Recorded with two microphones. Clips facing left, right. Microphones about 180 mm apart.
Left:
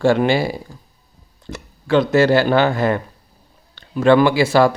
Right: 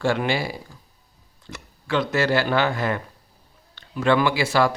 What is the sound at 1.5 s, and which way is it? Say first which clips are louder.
Speech: left 8 dB; 30° left (ahead or behind).